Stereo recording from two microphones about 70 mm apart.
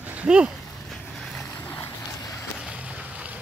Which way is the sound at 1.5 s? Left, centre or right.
Left.